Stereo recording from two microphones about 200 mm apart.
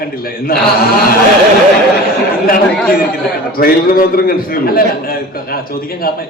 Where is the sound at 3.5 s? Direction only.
45° left (ahead or behind).